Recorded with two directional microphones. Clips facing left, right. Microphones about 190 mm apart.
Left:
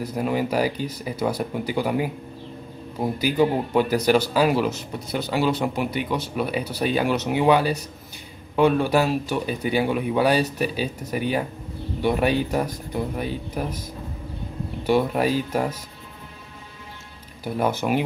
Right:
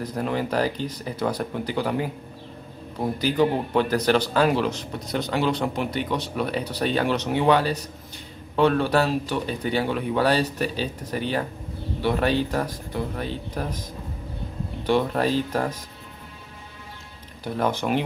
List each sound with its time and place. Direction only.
0.0 s speech: 10° left (ahead or behind)
14.9 s speech: 10° left (ahead or behind)
17.4 s speech: 10° left (ahead or behind)